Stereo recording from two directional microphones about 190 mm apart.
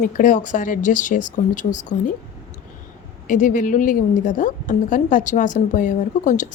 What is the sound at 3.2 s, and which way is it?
A woman's voice, 45° left (ahead or behind).